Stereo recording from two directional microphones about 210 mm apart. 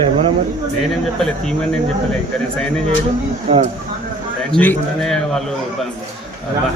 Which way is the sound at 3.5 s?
25° right (ahead or behind).